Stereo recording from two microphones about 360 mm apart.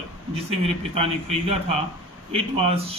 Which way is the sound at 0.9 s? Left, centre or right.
Centre.